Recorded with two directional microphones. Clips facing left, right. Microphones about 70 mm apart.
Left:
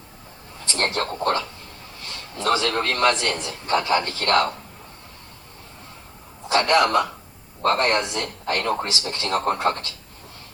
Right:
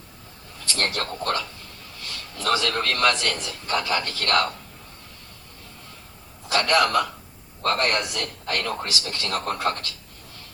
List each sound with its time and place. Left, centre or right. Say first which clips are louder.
0.6 s a man's voice: left 3 dB; left
6.5 s a man's voice: left 2 dB; left